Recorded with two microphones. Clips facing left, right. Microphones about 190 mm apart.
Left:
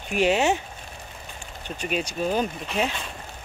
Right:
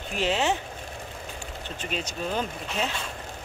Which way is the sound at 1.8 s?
10° left (ahead or behind).